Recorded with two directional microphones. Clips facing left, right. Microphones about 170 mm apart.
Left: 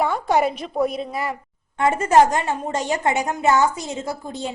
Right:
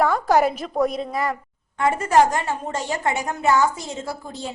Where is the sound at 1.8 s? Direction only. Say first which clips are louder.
Left 2 dB; 20° left (ahead or behind).